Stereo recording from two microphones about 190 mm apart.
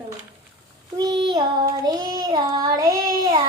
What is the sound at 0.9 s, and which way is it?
Child singing, 20° right (ahead or behind).